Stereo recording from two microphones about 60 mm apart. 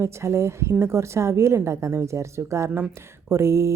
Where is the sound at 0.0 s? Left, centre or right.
Right.